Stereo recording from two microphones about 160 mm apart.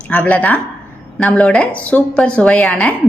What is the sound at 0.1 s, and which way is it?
A woman's voice, 10° left (ahead or behind).